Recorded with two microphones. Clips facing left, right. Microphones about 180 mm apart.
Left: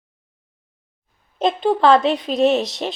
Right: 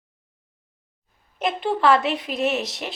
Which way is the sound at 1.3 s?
25° left (ahead or behind).